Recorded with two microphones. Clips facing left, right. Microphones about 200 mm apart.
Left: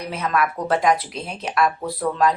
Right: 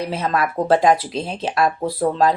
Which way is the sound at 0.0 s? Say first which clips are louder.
Right 2 dB; 30° right (ahead or behind).